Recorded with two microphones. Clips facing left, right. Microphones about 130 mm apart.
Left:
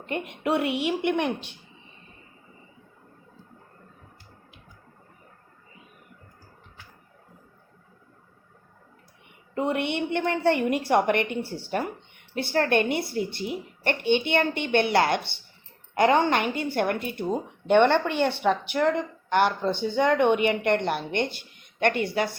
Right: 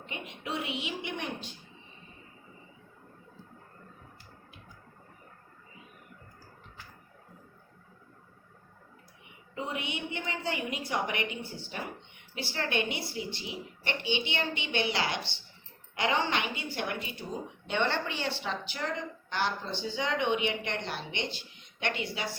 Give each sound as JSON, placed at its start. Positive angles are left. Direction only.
{"t": 0.0, "sound": "a woman's voice", "side_deg": 55}
{"t": 9.6, "sound": "a woman's voice", "side_deg": 65}